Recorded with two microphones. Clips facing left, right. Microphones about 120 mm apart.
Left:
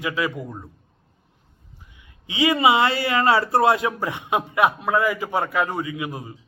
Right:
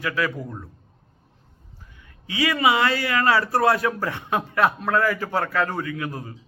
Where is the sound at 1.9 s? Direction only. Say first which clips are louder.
Left 2 dB; 20° left (ahead or behind).